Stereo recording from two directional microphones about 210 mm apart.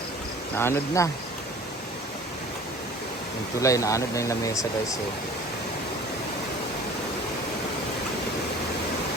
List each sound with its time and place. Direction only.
0.5 s speech: 10° left (ahead or behind)
3.6 s speech: 15° left (ahead or behind)